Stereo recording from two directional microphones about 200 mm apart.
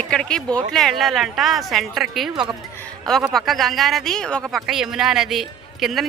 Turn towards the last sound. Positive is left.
turn(degrees=0)  # may be behind; listen again after turning